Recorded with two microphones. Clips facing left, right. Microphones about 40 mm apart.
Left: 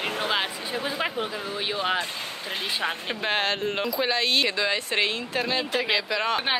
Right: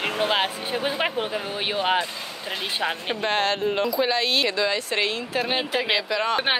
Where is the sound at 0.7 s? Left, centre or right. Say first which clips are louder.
Right 3 dB; right.